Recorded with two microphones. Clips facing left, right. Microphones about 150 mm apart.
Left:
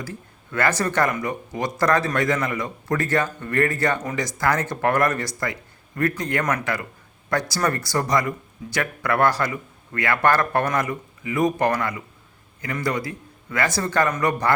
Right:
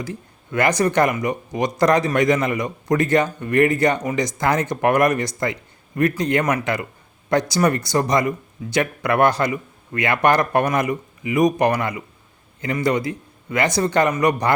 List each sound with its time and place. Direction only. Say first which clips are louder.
0.0 s a man's voice: right 4 dB; 15° right (ahead or behind)